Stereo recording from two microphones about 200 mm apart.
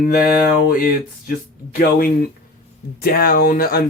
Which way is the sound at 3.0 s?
50° left (ahead or behind).